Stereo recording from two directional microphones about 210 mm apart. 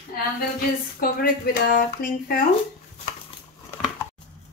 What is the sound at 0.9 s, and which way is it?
Speech, 45° left (ahead or behind).